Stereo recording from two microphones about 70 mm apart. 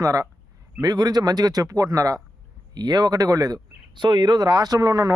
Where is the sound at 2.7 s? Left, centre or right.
Right.